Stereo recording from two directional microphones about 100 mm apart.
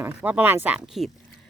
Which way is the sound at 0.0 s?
20° right (ahead or behind).